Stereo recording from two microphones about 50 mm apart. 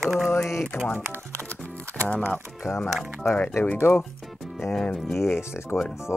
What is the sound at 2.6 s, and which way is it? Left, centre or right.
Speech, left.